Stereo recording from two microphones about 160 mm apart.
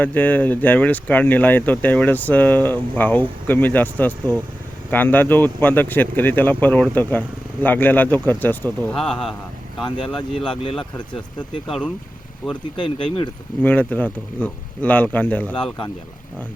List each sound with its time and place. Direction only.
0.0 s speech: 10° left (ahead or behind)
10.2 s speech: 35° left (ahead or behind)
11.3 s speech: 5° left (ahead or behind)
12.7 s speech: 30° left (ahead or behind)
13.6 s speech: 10° left (ahead or behind)